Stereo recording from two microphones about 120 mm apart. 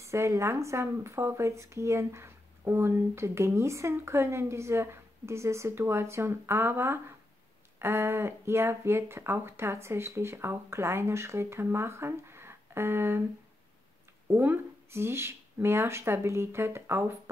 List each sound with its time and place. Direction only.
0.0 s speech: 25° right (ahead or behind)
14.2 s speech: 20° right (ahead or behind)